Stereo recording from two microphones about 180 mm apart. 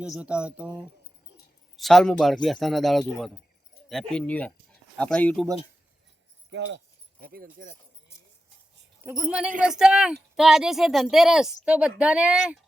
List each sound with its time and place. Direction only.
0.0 s speech: 5° right (ahead or behind)
6.5 s speech: 90° right
7.2 s speech: 55° right (ahead or behind)
9.0 s speech: 5° right (ahead or behind)